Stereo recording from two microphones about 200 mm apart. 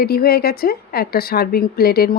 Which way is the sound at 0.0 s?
50° left (ahead or behind).